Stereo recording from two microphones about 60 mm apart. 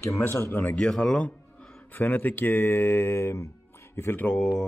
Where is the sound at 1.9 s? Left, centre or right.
Left.